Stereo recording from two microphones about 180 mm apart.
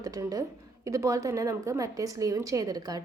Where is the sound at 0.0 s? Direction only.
20° right (ahead or behind).